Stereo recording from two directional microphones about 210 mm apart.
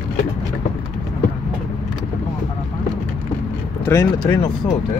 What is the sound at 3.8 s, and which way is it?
Speech, 15° left (ahead or behind).